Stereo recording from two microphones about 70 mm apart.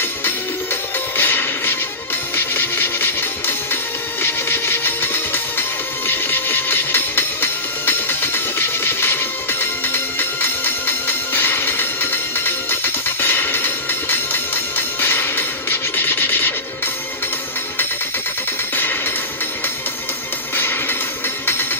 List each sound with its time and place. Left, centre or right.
1.1 s music: left
18.8 s music: left
20.5 s music: left